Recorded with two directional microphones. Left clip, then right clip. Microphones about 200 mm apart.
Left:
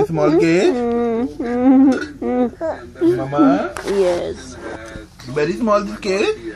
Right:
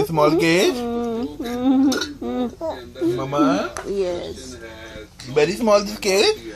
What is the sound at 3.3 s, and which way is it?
Speech, 30° right (ahead or behind).